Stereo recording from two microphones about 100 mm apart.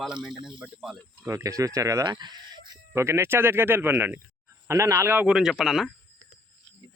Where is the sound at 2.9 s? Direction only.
25° right (ahead or behind).